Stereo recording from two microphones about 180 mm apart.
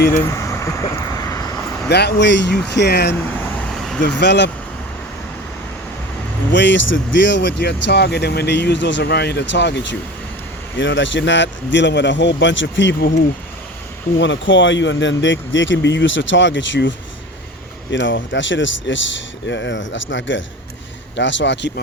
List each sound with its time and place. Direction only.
0.1 s speech: 15° left (ahead or behind)
1.1 s vehicle: 20° left (ahead or behind)
1.9 s speech: 65° left (ahead or behind)
3.3 s vehicle: 10° left (ahead or behind)
4.2 s speech: 70° left (ahead or behind)
6.5 s speech: 85° left
10.8 s a man's voice: 90° left
14.2 s speech: 90° left
17.9 s a man's voice: 90° left